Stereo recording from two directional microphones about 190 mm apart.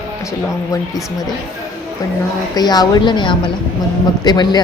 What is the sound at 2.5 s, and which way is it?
Speech, 20° left (ahead or behind).